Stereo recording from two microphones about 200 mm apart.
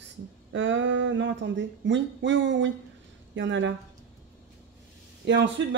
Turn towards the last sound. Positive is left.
turn(degrees=-65)  # may be behind; listen again after turning